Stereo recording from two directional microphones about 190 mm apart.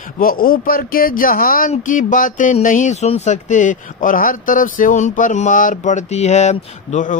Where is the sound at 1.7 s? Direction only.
45° left (ahead or behind).